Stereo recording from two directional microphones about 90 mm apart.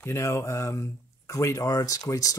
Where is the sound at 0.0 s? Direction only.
30° left (ahead or behind).